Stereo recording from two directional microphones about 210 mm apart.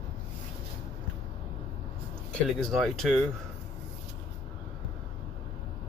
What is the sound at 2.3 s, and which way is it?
Speech, 5° left (ahead or behind).